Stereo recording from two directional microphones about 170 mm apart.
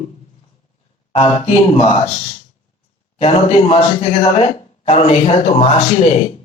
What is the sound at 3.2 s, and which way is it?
Speech, 35° left (ahead or behind).